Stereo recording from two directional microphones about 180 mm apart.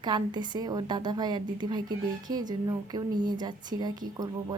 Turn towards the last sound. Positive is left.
turn(degrees=-20)  # may be behind; listen again after turning